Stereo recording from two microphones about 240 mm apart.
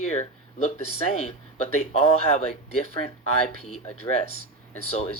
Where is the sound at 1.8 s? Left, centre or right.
Left.